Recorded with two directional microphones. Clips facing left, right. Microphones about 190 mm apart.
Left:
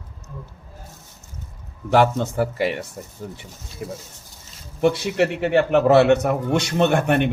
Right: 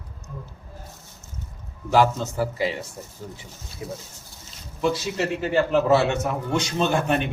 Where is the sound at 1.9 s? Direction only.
60° left (ahead or behind).